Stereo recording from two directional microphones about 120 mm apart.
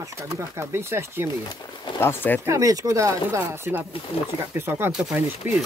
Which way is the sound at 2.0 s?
20° left (ahead or behind).